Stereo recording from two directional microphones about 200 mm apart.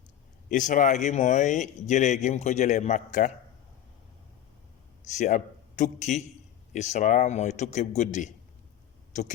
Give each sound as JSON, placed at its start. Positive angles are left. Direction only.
{"t": 0.4, "sound": "speech", "side_deg": 40}
{"t": 5.1, "sound": "a man's voice", "side_deg": 35}